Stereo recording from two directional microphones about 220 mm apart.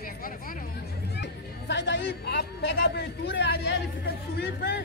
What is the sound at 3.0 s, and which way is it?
Speech, 50° left (ahead or behind).